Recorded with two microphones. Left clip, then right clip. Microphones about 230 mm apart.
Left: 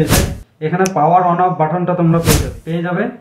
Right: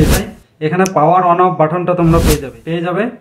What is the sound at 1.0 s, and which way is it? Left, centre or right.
Speech, right.